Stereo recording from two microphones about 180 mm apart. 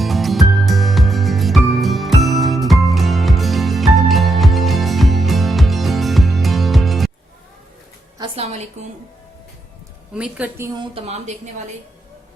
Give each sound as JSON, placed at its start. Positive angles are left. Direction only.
{"t": 0.0, "sound": "music", "side_deg": 0}
{"t": 8.2, "sound": "a sound", "side_deg": -35}
{"t": 10.2, "sound": "a woman's voice", "side_deg": -5}
{"t": 10.8, "sound": "speech", "side_deg": -35}